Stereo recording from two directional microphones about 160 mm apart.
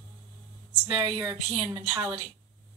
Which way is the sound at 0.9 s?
25° right (ahead or behind).